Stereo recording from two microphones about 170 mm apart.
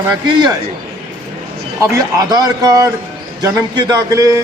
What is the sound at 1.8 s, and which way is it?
A man's voice, 20° right (ahead or behind).